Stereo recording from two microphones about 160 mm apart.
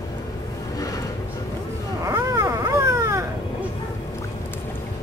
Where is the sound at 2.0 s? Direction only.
20° right (ahead or behind).